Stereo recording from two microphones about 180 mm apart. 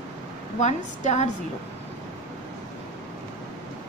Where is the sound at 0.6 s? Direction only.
40° left (ahead or behind).